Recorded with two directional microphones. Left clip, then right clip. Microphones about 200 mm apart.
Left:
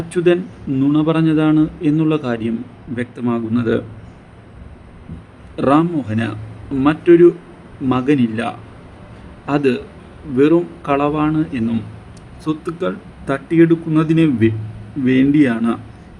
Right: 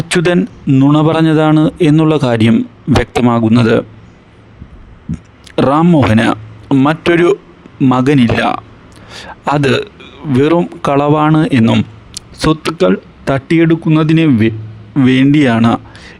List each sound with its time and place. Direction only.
0.1 s a man's voice: 50° right (ahead or behind)
5.5 s a man's voice: 55° right (ahead or behind)
15.0 s a man's voice: 55° right (ahead or behind)